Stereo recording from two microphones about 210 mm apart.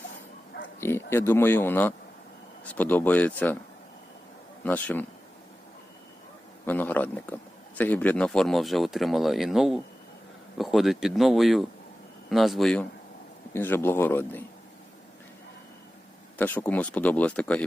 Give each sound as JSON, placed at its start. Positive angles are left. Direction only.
{"t": 0.8, "sound": "speech", "side_deg": 10}
{"t": 4.6, "sound": "speech", "side_deg": 5}
{"t": 6.7, "sound": "speech", "side_deg": 10}
{"t": 16.4, "sound": "speech", "side_deg": 10}